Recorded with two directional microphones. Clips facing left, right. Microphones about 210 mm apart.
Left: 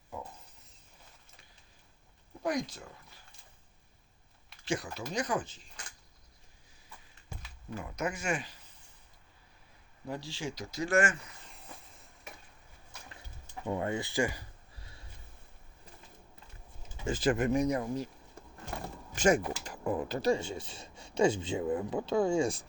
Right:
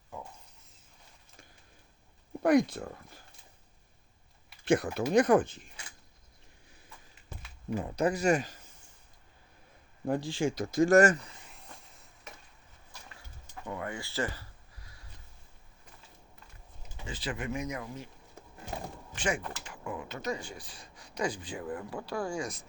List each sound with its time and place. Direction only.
2.4 s speech: 60° right (ahead or behind)
4.6 s speech: 55° right (ahead or behind)
7.8 s speech: 35° right (ahead or behind)
10.1 s speech: 50° right (ahead or behind)
11.4 s train: centre (ahead or behind)
13.7 s speech: 25° left (ahead or behind)
14.8 s a sound: 25° left (ahead or behind)
17.1 s speech: 45° left (ahead or behind)
19.1 s a sound: 45° left (ahead or behind)
19.6 s speech: 40° left (ahead or behind)